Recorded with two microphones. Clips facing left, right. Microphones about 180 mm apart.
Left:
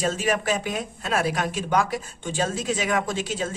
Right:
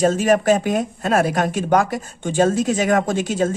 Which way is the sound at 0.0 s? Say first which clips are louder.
Right 8 dB; 45° right (ahead or behind).